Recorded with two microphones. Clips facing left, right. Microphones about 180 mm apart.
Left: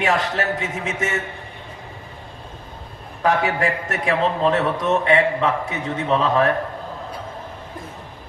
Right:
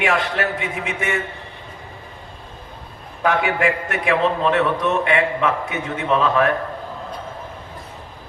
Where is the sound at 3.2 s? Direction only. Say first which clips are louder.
Right 1 dB; 40° left (ahead or behind).